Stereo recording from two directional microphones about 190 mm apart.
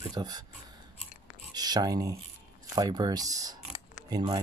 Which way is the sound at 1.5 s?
20° right (ahead or behind).